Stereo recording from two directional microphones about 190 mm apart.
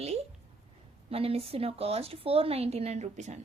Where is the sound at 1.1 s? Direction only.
30° right (ahead or behind).